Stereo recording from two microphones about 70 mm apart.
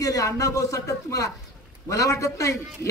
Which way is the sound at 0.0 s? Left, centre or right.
Left.